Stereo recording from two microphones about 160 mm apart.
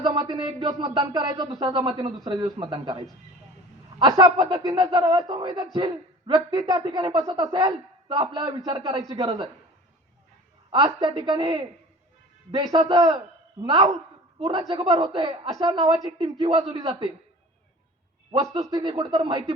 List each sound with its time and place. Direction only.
0.0 s speech: 30° right (ahead or behind)
4.0 s speech: 25° right (ahead or behind)
10.7 s speech: 30° right (ahead or behind)
18.3 s speech: 25° right (ahead or behind)